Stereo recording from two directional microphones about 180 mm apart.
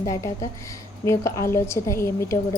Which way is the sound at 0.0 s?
20° left (ahead or behind).